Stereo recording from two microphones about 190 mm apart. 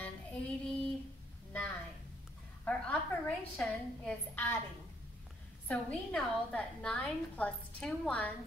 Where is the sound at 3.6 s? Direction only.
10° left (ahead or behind).